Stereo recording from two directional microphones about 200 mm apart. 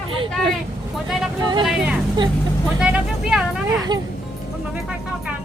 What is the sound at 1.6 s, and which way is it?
A woman's voice, 5° right (ahead or behind).